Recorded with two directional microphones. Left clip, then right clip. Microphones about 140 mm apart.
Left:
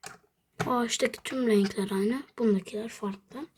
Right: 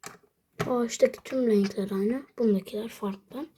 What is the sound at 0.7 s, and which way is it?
Speech, 25° left (ahead or behind).